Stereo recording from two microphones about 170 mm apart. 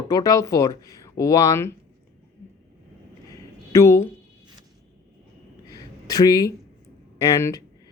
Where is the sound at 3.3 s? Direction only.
15° left (ahead or behind).